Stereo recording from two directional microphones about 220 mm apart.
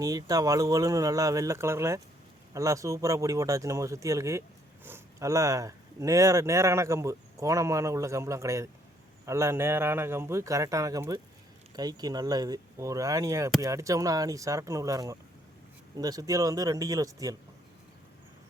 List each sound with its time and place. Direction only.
0.0 s speech: 15° right (ahead or behind)